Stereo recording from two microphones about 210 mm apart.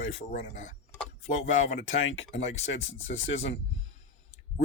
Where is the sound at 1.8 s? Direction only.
70° left (ahead or behind).